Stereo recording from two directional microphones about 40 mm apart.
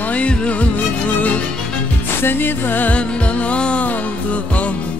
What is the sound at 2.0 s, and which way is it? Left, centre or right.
Music, left.